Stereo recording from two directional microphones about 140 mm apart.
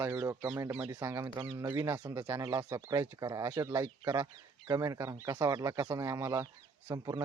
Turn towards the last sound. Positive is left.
turn(degrees=-25)  # may be behind; listen again after turning